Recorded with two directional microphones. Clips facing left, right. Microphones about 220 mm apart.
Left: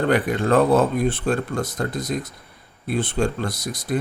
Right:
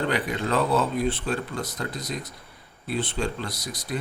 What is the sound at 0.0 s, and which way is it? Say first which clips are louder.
Speech: left 6 dB; 50° left (ahead or behind).